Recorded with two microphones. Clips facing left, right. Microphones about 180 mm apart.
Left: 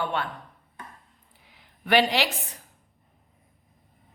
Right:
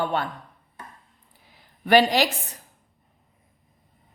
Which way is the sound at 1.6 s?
40° right (ahead or behind).